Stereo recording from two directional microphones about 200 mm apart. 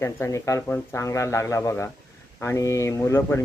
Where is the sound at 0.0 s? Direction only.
15° left (ahead or behind).